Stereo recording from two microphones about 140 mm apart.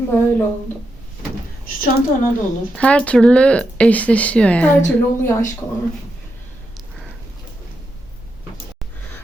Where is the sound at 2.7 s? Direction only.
10° left (ahead or behind).